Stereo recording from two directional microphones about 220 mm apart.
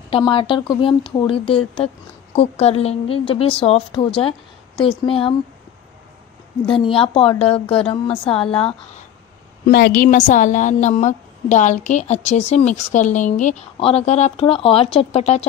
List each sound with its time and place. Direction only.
0.1 s a woman's voice: 25° left (ahead or behind)
6.7 s a woman's voice: 25° left (ahead or behind)
9.7 s a woman's voice: 45° left (ahead or behind); by 15.4 s 30° left (ahead or behind)